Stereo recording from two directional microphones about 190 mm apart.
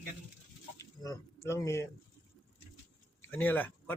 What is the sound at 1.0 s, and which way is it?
Speech, 15° left (ahead or behind).